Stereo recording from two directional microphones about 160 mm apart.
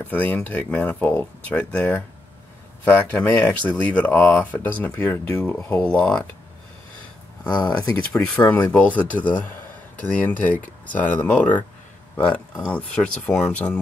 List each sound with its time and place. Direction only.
0.0 s speech: 10° left (ahead or behind)
3.1 s speech: 10° left (ahead or behind)
7.4 s speech: 25° left (ahead or behind)
7.7 s speech: 5° left (ahead or behind)